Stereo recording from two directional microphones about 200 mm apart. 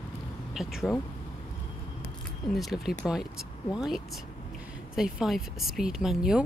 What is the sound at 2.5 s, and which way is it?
Speech, centre (ahead or behind).